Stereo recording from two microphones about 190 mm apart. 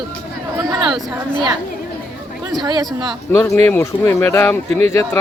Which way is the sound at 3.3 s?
15° left (ahead or behind).